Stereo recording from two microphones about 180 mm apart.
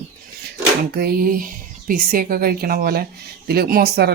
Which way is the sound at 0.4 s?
60° right (ahead or behind).